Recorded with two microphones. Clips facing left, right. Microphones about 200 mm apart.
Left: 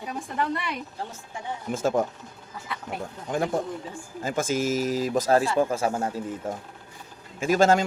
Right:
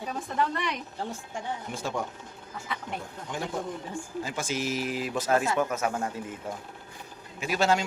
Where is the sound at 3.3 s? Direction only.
50° left (ahead or behind).